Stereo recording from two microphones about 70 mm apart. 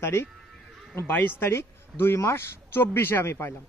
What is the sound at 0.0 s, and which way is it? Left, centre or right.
Speech, left.